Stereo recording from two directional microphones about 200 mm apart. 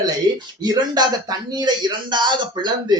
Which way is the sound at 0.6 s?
20° right (ahead or behind).